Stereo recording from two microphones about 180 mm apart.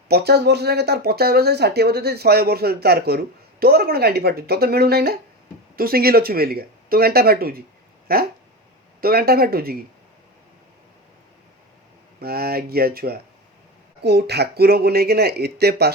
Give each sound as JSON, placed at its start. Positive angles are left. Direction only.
{"t": 0.1, "sound": "speech", "side_deg": -65}
{"t": 12.2, "sound": "speech", "side_deg": -60}